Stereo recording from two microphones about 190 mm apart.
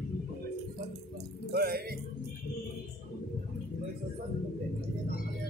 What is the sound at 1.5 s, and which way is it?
Music, 55° right (ahead or behind).